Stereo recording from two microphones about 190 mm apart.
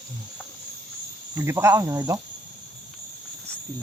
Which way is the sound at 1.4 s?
15° right (ahead or behind).